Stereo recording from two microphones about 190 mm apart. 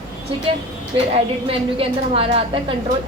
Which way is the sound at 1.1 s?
30° right (ahead or behind).